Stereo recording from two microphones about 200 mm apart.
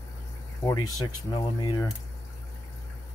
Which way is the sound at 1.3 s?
20° left (ahead or behind).